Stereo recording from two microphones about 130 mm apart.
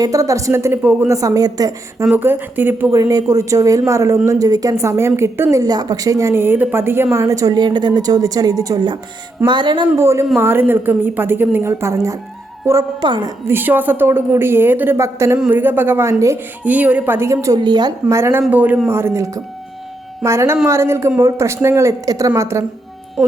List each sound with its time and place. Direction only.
0.0 s a woman's voice: 25° right (ahead or behind)
1.1 s a woman's voice: 25° right (ahead or behind)
2.0 s a woman's voice: 15° right (ahead or behind)
3.0 s a woman's voice: 30° right (ahead or behind)
10.0 s a woman's voice: 20° right (ahead or behind)
13.0 s a woman's voice: 35° right (ahead or behind)
13.5 s a woman's voice: 15° right (ahead or behind); by 18.2 s 30° right (ahead or behind)
18.2 s a woman's voice: 20° right (ahead or behind)